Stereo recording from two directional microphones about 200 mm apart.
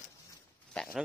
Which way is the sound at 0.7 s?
Centre (ahead or behind).